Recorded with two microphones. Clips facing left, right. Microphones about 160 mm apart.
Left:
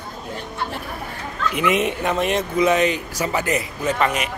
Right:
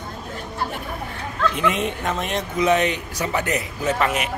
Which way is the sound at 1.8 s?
5° left (ahead or behind).